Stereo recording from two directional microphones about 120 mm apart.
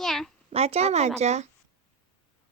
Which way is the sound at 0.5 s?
60° right (ahead or behind).